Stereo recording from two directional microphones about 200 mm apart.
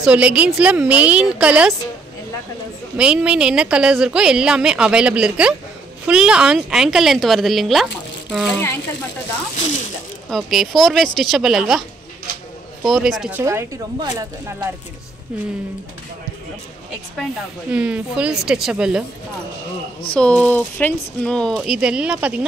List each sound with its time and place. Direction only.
0.0 s a woman's voice: 5° right (ahead or behind)
3.0 s a woman's voice: 5° right (ahead or behind)
10.3 s a woman's voice: centre (ahead or behind)
12.8 s a woman's voice: centre (ahead or behind)
13.4 s a woman's voice: 15° right (ahead or behind)
17.2 s a woman's voice: 5° right (ahead or behind)
20.2 s a woman's voice: 5° left (ahead or behind)